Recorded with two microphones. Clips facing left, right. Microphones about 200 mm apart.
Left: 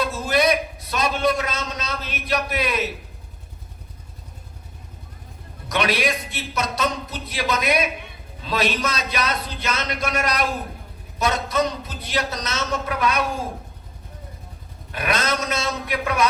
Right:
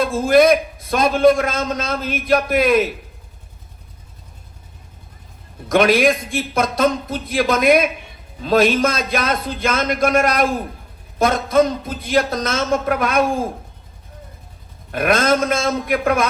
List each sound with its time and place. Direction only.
0.0 s a man's voice: 50° right (ahead or behind)
5.6 s a man's voice: 50° right (ahead or behind)
14.9 s a man's voice: 50° right (ahead or behind)